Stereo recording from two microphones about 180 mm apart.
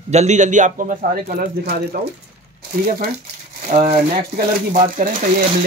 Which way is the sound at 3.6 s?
45° right (ahead or behind).